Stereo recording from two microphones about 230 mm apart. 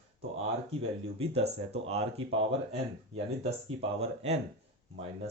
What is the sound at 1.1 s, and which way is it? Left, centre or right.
Speech, right.